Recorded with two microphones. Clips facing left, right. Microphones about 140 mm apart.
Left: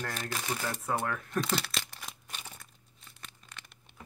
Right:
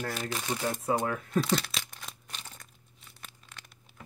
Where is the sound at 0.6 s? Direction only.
25° right (ahead or behind).